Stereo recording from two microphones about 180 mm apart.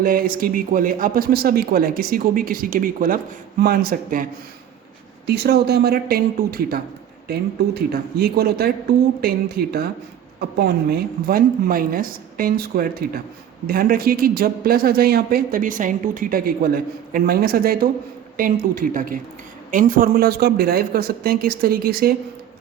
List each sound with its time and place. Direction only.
0.0 s speech: 50° right (ahead or behind)
5.2 s speech: 65° right (ahead or behind)